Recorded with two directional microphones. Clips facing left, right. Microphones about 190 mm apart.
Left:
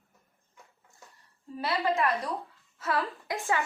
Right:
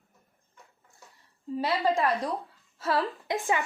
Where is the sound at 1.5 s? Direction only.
25° right (ahead or behind).